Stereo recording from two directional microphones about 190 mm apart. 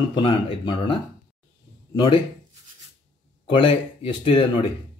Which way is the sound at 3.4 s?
30° left (ahead or behind).